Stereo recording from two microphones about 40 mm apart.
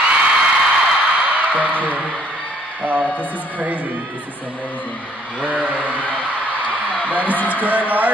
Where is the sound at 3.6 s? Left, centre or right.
Right.